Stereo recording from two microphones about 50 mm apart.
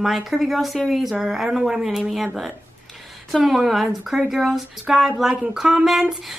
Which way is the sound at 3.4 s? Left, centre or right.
Centre.